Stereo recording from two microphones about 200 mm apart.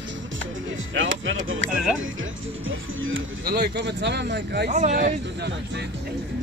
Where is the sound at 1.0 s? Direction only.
70° right (ahead or behind).